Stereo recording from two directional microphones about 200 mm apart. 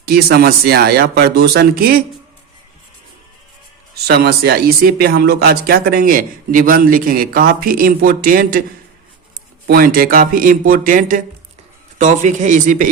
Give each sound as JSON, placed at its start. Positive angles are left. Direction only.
{"t": 0.0, "sound": "speech", "side_deg": -50}
{"t": 3.9, "sound": "speech", "side_deg": -55}
{"t": 9.6, "sound": "speech", "side_deg": -50}